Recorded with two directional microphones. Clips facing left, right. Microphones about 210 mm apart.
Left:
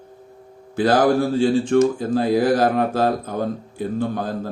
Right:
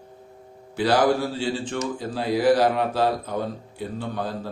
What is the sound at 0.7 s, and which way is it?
Speech, 50° left (ahead or behind).